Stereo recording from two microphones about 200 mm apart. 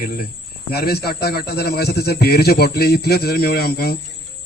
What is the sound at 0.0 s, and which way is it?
A man's voice, 45° left (ahead or behind).